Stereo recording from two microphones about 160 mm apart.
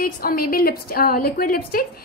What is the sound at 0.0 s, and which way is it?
A woman's voice, 65° left (ahead or behind).